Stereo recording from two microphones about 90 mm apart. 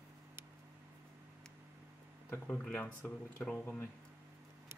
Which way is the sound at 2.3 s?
20° left (ahead or behind).